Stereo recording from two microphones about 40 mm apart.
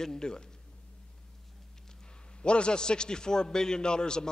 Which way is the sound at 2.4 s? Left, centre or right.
Left.